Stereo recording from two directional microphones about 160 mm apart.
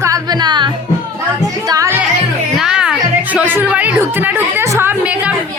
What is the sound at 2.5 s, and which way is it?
Music, 5° right (ahead or behind).